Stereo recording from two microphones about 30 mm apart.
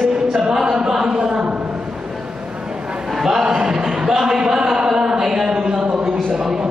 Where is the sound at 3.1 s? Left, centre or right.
Centre.